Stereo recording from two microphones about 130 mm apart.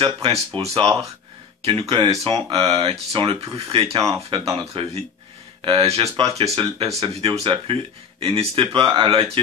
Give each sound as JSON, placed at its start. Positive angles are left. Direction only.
{"t": 0.0, "sound": "speech", "side_deg": -45}